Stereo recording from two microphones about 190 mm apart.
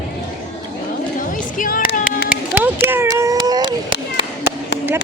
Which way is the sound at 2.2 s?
10° right (ahead or behind).